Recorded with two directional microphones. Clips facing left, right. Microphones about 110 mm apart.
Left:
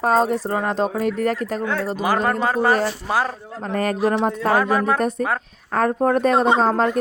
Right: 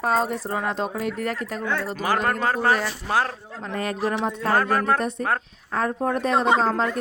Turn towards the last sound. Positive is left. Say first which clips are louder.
# left 3 dB
turn(degrees=45)  # may be behind; listen again after turning